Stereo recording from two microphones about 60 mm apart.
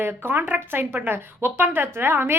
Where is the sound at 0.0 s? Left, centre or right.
Right.